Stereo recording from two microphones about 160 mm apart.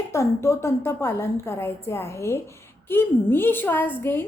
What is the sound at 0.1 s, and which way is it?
A woman's voice, 20° left (ahead or behind).